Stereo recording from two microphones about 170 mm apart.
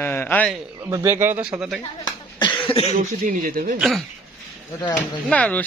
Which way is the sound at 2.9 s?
50° right (ahead or behind).